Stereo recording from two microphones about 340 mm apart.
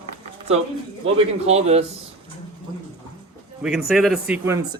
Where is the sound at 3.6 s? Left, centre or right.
Centre.